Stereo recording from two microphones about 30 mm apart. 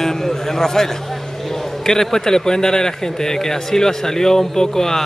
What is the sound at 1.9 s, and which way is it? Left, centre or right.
A man's voice, centre.